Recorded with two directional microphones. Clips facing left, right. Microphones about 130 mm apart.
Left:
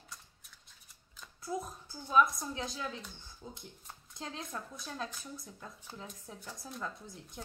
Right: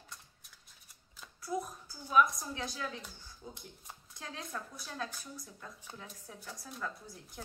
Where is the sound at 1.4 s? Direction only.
25° left (ahead or behind).